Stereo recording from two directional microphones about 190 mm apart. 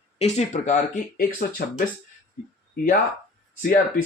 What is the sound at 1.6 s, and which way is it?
Speech, 50° left (ahead or behind).